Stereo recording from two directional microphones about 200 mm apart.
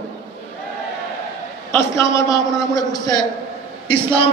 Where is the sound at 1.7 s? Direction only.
15° left (ahead or behind).